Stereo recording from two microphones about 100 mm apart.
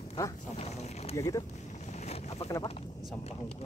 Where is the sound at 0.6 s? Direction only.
90° left.